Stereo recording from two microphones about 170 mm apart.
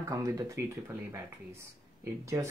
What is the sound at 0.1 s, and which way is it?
Speech, 20° right (ahead or behind).